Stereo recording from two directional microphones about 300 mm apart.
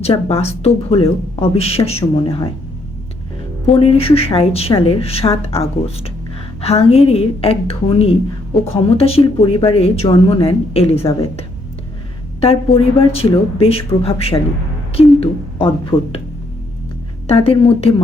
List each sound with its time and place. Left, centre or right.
0.0 s speech: centre
3.7 s speech: centre
6.6 s speech: centre
17.2 s speech: centre